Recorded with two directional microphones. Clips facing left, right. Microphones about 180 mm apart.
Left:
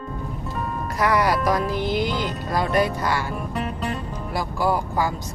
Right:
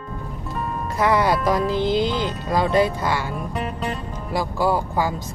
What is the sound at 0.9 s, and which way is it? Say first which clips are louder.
Speech: right 2 dB; 25° right (ahead or behind).